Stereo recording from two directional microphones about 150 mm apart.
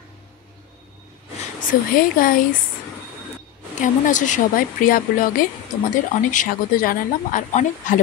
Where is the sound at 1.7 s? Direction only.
70° left (ahead or behind).